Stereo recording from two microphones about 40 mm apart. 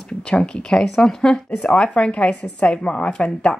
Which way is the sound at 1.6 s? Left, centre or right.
Left.